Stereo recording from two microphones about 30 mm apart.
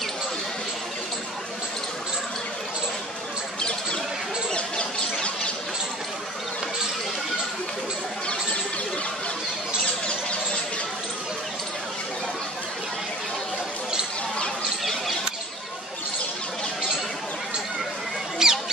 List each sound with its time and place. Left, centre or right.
4.6 s bird: left
18.4 s mouse: centre